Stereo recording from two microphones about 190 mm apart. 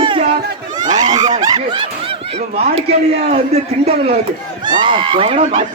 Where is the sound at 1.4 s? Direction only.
25° right (ahead or behind).